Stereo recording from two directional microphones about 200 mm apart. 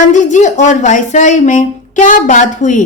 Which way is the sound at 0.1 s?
35° left (ahead or behind).